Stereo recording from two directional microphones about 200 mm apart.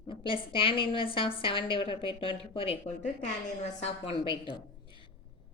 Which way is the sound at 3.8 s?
25° left (ahead or behind).